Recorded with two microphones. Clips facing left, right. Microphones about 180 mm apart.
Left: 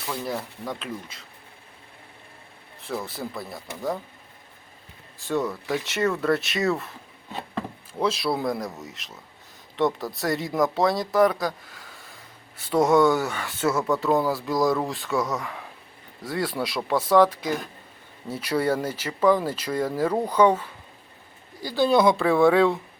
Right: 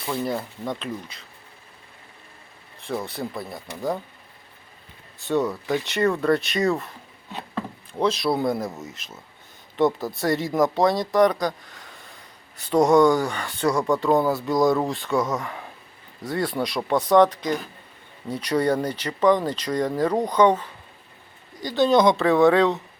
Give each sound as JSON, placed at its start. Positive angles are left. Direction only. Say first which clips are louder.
{"t": 0.1, "sound": "speech", "louder": "right 4 dB", "side_deg": 0}
{"t": 3.0, "sound": "speech", "louder": "right 2 dB", "side_deg": 0}
{"t": 5.2, "sound": "speech", "louder": "right 3 dB", "side_deg": 0}
{"t": 7.9, "sound": "speech", "louder": "right 3 dB", "side_deg": 0}